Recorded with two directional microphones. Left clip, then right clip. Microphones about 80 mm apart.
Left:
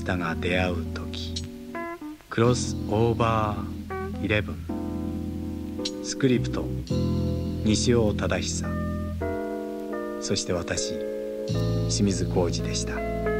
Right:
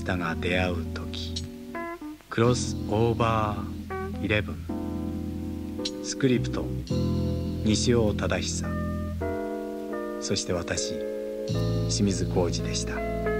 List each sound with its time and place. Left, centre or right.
0.1 s speech: left
2.3 s speech: left
6.2 s speech: left
9.2 s music: left
10.2 s speech: left